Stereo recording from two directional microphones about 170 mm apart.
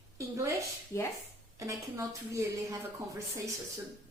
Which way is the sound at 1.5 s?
20° right (ahead or behind).